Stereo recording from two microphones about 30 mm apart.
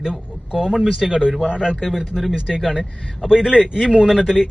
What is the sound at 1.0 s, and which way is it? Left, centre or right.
A man's voice, centre.